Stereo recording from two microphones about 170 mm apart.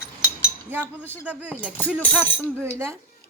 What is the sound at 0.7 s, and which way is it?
Speech, 10° right (ahead or behind).